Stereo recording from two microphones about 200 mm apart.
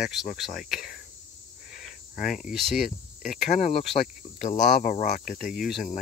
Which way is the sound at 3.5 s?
35° left (ahead or behind).